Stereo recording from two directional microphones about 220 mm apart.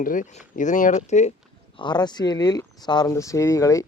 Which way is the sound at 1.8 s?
20° left (ahead or behind).